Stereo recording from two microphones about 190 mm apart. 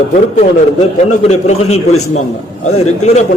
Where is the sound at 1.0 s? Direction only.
35° left (ahead or behind).